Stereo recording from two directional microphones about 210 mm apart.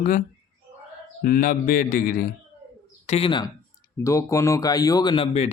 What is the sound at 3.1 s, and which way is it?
A man's voice, 25° left (ahead or behind).